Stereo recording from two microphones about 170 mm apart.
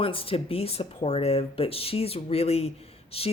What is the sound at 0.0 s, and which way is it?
Speech, 35° left (ahead or behind).